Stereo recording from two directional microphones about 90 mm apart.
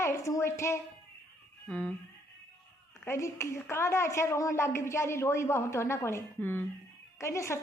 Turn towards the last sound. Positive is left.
turn(degrees=30)  # may be behind; listen again after turning